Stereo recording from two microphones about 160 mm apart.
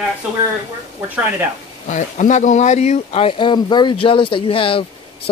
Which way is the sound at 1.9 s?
50° left (ahead or behind).